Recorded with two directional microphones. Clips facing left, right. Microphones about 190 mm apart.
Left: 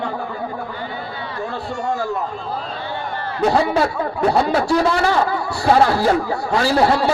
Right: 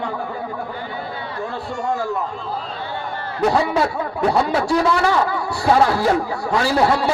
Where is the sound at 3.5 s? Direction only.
35° left (ahead or behind).